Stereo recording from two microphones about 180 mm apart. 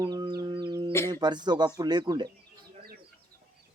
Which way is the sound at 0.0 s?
25° right (ahead or behind).